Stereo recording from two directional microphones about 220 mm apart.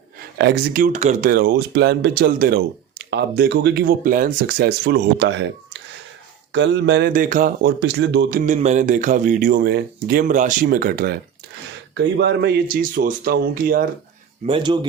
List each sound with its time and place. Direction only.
0.3 s speech: 45° right (ahead or behind)
6.5 s speech: 55° right (ahead or behind)
7.1 s speech: 40° right (ahead or behind)
14.4 s speech: 20° right (ahead or behind)